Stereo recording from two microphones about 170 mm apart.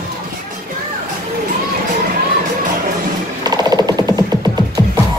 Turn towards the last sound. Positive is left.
turn(degrees=-25)  # may be behind; listen again after turning